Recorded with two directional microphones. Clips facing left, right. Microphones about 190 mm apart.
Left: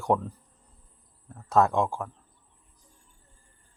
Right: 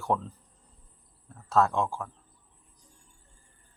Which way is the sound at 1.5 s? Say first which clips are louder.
Left 2 dB; 15° left (ahead or behind).